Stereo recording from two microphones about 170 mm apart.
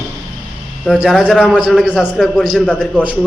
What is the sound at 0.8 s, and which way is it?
A man's voice, centre (ahead or behind).